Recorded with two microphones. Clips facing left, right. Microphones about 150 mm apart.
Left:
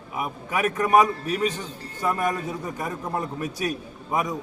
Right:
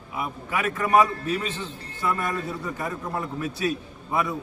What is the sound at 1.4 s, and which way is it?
A man's voice, 15° left (ahead or behind).